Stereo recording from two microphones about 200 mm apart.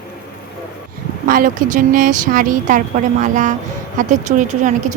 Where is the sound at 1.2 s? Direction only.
45° right (ahead or behind).